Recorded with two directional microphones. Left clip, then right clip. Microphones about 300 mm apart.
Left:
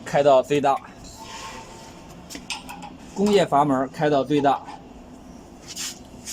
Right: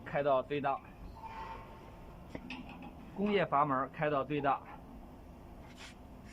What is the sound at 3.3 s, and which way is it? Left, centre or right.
Speech, left.